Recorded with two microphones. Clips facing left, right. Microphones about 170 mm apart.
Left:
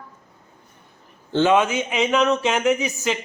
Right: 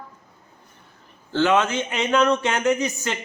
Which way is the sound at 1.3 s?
20° left (ahead or behind).